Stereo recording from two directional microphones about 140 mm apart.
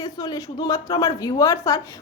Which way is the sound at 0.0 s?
25° left (ahead or behind).